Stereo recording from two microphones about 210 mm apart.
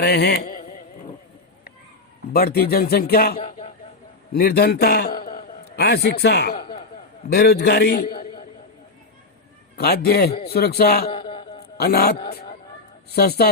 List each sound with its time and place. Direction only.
0.0 s carnatic music: 50° left (ahead or behind)
2.3 s speech: 50° left (ahead or behind)
3.3 s speech: 30° left (ahead or behind)
4.3 s a man's voice: 45° left (ahead or behind)
6.6 s a sound: 25° left (ahead or behind)
7.3 s speech: 50° left (ahead or behind)
9.7 s speech: 50° left (ahead or behind)
11.0 s a sound: 25° left (ahead or behind)
11.8 s a woman's voice: 45° left (ahead or behind)